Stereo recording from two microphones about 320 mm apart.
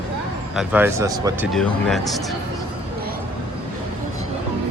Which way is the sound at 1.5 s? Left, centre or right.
Centre.